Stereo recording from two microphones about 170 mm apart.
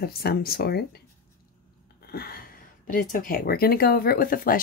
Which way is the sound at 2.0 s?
65° left (ahead or behind).